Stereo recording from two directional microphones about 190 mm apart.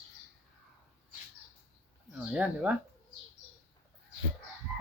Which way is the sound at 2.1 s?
5° right (ahead or behind).